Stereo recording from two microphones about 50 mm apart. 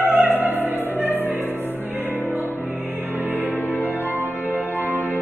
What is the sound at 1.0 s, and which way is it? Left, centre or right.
Music, right.